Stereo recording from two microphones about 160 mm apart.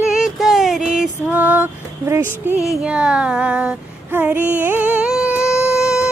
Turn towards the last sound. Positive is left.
turn(degrees=-5)  # may be behind; listen again after turning